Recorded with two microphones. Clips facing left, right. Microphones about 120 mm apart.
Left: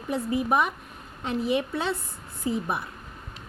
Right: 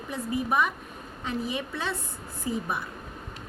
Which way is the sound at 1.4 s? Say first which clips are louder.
Left 9 dB; 25° left (ahead or behind).